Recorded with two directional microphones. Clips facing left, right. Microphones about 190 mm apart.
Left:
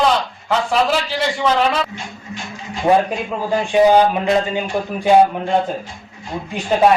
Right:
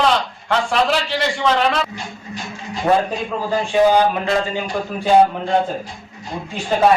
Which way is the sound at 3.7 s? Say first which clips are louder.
Left 2 dB; 15° left (ahead or behind).